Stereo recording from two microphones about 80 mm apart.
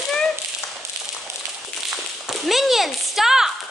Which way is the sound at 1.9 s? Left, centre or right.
Centre.